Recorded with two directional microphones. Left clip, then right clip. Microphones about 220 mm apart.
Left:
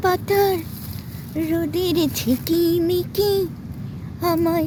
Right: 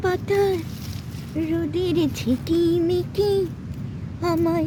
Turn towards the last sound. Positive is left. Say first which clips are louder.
# left 2 dB
turn(degrees=10)  # may be behind; listen again after turning